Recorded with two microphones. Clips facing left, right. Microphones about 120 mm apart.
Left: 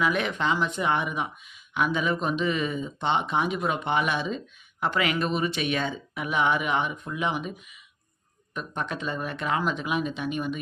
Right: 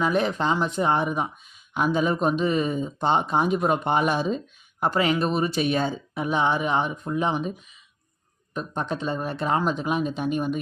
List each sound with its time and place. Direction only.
0.0 s speech: 35° right (ahead or behind)
8.5 s speech: 35° right (ahead or behind)